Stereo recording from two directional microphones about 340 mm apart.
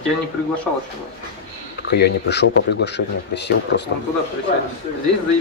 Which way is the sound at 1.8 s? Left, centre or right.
Left.